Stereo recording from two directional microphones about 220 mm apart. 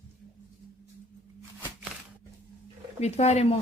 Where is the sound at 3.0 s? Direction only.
30° left (ahead or behind).